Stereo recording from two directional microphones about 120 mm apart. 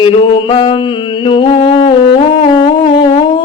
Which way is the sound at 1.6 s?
45° left (ahead or behind).